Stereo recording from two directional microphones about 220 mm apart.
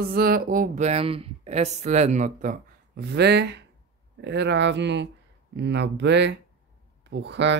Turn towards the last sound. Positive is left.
turn(degrees=-50)  # may be behind; listen again after turning